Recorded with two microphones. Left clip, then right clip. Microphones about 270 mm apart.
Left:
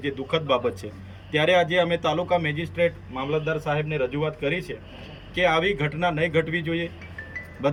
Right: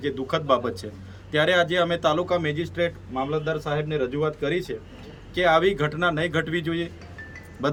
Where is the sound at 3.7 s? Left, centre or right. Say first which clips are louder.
Even; centre.